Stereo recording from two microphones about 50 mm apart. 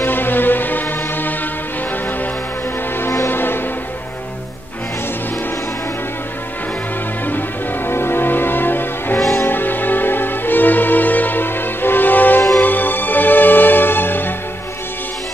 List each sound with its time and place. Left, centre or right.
0.0 s music: left
3.3 s music: left
7.2 s music: left